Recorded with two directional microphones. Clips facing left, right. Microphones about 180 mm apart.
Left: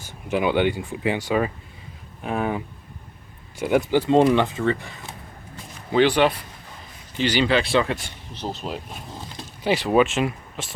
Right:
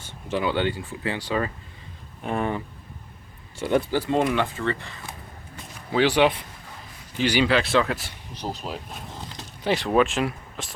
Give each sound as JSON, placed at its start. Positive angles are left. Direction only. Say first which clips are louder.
{"t": 0.0, "sound": "speech", "louder": "left 3 dB", "side_deg": 15}
{"t": 4.0, "sound": "speech", "louder": "left 6 dB", "side_deg": 25}
{"t": 4.5, "sound": "speech", "louder": "left 4 dB", "side_deg": 15}
{"t": 5.9, "sound": "a man's voice", "louder": "left 2 dB", "side_deg": -10}